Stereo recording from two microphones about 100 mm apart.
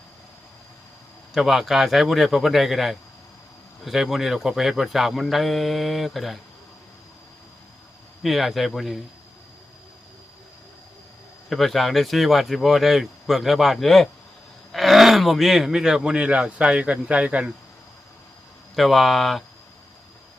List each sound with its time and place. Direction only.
1.3 s speech: centre (ahead or behind)
8.2 s speech: centre (ahead or behind)
11.4 s speech: centre (ahead or behind)
18.8 s speech: centre (ahead or behind)